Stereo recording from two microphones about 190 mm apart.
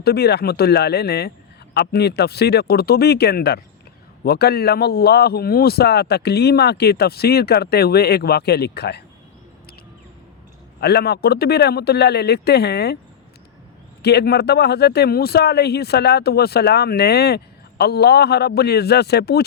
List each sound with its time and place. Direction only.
0.0 s speech: 55° left (ahead or behind)
10.8 s speech: 60° left (ahead or behind)
14.0 s speech: 60° left (ahead or behind)